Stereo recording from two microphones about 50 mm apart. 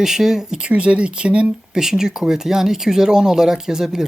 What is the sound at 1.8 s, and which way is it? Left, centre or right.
Speech, centre.